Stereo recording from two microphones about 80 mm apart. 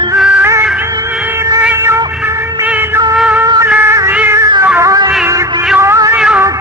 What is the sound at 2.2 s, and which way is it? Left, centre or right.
Music, right.